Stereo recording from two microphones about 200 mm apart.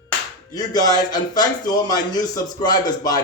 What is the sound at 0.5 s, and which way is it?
Speech, 20° left (ahead or behind).